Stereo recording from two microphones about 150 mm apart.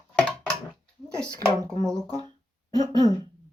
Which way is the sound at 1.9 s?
25° right (ahead or behind).